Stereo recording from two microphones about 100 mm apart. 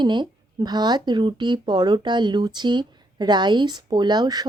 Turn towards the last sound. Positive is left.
turn(degrees=-45)  # may be behind; listen again after turning